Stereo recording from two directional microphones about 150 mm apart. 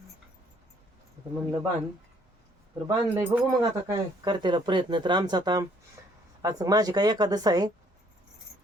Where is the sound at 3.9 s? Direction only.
30° right (ahead or behind).